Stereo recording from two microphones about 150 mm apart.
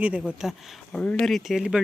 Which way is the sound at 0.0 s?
5° right (ahead or behind).